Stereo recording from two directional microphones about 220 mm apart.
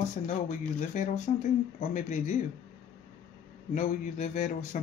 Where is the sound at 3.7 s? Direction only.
35° left (ahead or behind).